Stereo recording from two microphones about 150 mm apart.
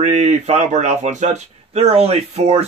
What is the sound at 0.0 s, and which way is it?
Speech, 50° right (ahead or behind).